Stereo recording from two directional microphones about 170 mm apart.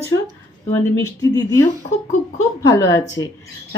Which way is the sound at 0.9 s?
20° left (ahead or behind).